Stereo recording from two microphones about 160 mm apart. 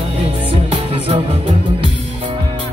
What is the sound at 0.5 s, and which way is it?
Music, 40° right (ahead or behind).